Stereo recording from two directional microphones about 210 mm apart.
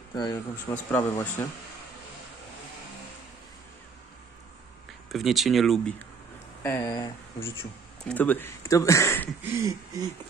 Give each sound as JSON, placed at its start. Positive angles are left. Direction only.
{"t": 0.1, "sound": "speech", "side_deg": 20}
{"t": 0.9, "sound": "speech", "side_deg": 10}
{"t": 5.1, "sound": "speech", "side_deg": 0}
{"t": 6.6, "sound": "speech", "side_deg": 15}
{"t": 9.4, "sound": "a sound", "side_deg": -10}